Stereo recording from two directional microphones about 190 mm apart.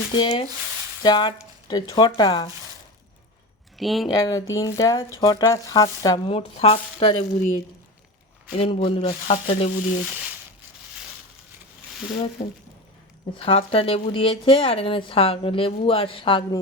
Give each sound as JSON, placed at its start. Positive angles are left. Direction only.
{"t": 0.1, "sound": "speech", "side_deg": 25}
{"t": 3.8, "sound": "speech", "side_deg": 0}
{"t": 4.1, "sound": "speech", "side_deg": 20}
{"t": 8.5, "sound": "frying", "side_deg": 30}
{"t": 12.4, "sound": "frying", "side_deg": 35}
{"t": 13.4, "sound": "speech", "side_deg": 30}